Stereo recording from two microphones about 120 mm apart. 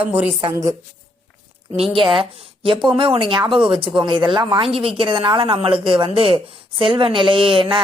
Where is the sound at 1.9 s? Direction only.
45° right (ahead or behind).